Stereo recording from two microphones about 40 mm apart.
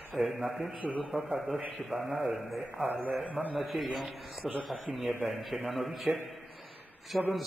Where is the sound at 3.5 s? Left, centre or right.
Centre.